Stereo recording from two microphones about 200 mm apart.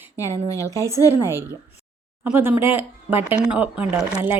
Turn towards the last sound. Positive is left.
turn(degrees=-10)  # may be behind; listen again after turning